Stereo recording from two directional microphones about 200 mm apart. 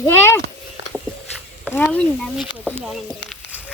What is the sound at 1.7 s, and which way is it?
Speech, 5° left (ahead or behind).